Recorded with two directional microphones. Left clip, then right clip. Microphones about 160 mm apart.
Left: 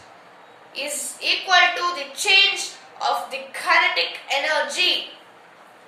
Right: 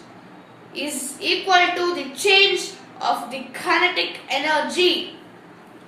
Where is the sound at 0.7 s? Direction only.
15° left (ahead or behind).